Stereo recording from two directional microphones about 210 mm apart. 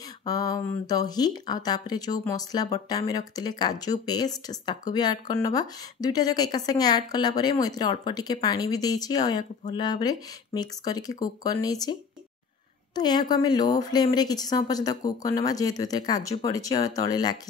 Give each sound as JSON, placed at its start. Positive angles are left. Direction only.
{"t": 0.2, "sound": "speech", "side_deg": 15}